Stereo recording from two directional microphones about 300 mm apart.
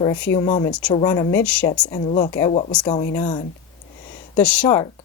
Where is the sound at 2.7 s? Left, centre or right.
Centre.